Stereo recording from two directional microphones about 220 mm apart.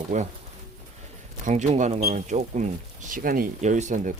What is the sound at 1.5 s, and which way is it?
Speech, 35° right (ahead or behind).